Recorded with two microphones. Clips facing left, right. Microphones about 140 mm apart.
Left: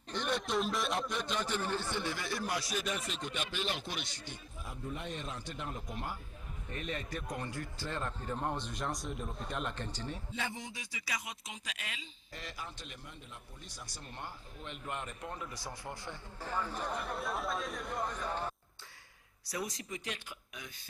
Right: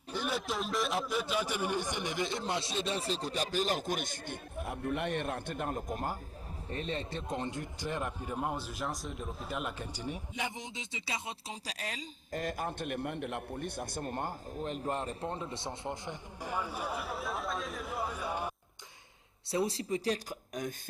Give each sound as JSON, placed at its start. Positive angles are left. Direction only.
{"t": 0.1, "sound": "a man's voice", "side_deg": -5}
{"t": 6.7, "sound": "a man's voice", "side_deg": -30}
{"t": 19.5, "sound": "speech", "side_deg": -30}